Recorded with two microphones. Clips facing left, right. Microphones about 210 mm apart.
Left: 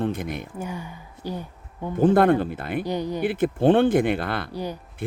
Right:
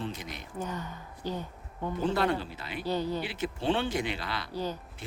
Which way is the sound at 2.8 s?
15° left (ahead or behind).